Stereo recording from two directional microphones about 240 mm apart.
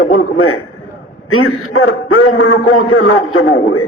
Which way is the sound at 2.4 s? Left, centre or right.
Left.